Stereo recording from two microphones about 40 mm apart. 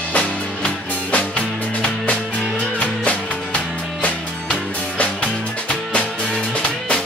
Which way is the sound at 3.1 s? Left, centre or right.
Left.